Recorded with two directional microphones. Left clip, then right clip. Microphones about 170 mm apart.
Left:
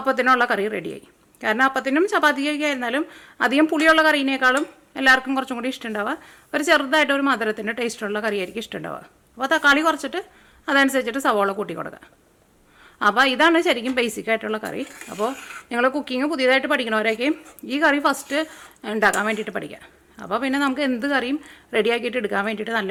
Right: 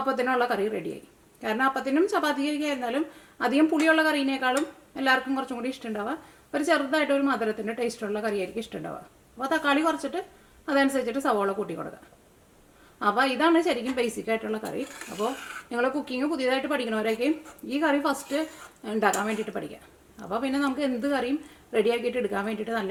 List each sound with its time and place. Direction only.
0.0 s a woman's voice: 25° left (ahead or behind)
13.0 s a woman's voice: 30° left (ahead or behind)
15.7 s a woman's voice: 25° left (ahead or behind)